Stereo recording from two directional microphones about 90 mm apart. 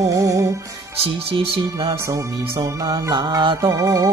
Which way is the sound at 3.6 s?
35° right (ahead or behind).